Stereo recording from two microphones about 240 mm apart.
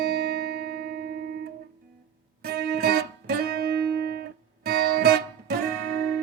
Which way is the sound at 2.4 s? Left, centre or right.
Right.